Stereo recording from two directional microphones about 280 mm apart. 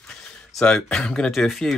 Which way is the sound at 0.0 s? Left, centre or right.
Centre.